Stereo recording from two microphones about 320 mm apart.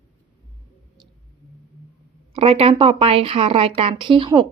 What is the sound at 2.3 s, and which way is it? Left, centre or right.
Speech, centre.